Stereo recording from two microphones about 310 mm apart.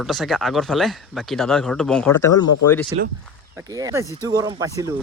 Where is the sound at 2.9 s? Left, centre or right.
Centre.